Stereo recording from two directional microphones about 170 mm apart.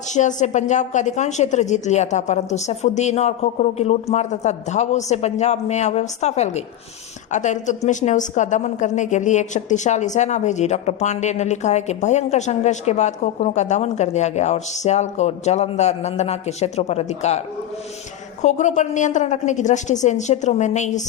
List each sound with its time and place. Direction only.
0.1 s a woman's voice: 45° left (ahead or behind)
18.4 s a woman's voice: 45° left (ahead or behind)